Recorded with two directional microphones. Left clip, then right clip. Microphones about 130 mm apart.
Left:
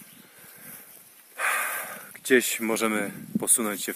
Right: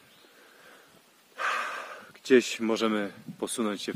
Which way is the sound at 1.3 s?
15° right (ahead or behind).